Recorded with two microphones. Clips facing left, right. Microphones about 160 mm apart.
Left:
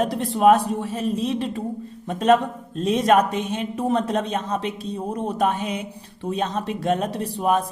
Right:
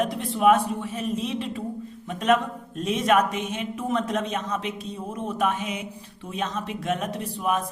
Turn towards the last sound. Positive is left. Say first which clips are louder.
# left 5 dB
turn(degrees=35)  # may be behind; listen again after turning